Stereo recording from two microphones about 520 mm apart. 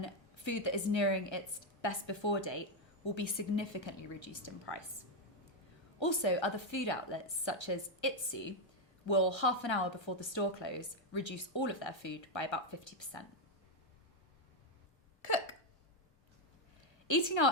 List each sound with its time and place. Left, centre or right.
0.0 s a woman's voice: left
6.0 s a woman's voice: left
17.1 s a woman's voice: left